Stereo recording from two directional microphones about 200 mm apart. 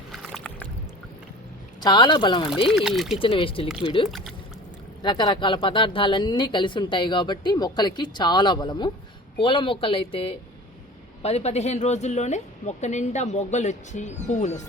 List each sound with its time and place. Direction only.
0.1 s boat: centre (ahead or behind)
1.8 s speech: 20° left (ahead or behind)
2.6 s speech: centre (ahead or behind)
3.2 s a woman's voice: 25° left (ahead or behind)